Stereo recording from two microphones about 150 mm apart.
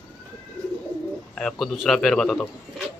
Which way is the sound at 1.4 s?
5° left (ahead or behind).